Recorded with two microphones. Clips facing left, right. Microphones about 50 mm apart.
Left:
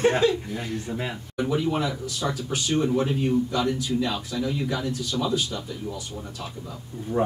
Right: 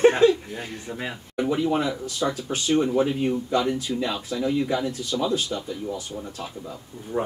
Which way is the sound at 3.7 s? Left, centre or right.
Right.